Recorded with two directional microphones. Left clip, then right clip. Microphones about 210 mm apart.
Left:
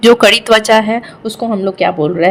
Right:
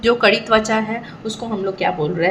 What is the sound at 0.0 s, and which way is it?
A woman's voice, 50° left (ahead or behind).